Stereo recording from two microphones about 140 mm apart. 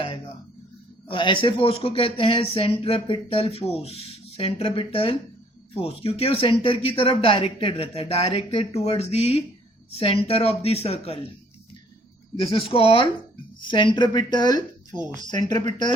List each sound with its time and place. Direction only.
1.0 s speech: 35° left (ahead or behind)
12.4 s speech: 40° left (ahead or behind)